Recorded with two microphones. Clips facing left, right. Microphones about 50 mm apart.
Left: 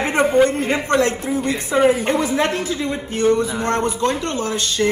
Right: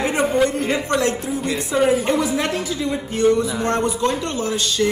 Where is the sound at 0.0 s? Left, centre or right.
Left.